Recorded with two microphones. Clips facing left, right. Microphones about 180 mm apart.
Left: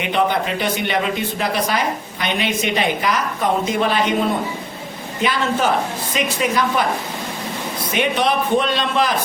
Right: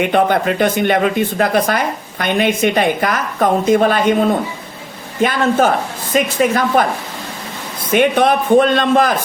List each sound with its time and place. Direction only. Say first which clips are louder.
0.0 s a woman's voice: right 5 dB; 50° right (ahead or behind)
5.2 s a woman's voice: right 5 dB; 50° right (ahead or behind)
7.9 s a woman's voice: right 6 dB; 50° right (ahead or behind)